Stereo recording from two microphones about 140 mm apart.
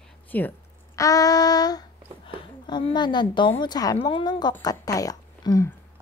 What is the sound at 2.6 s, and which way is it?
A woman's voice, 35° left (ahead or behind).